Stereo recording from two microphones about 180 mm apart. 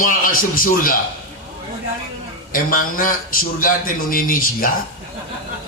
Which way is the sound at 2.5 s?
50° left (ahead or behind).